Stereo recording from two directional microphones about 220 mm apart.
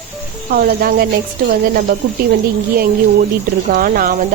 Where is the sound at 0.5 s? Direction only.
45° right (ahead or behind).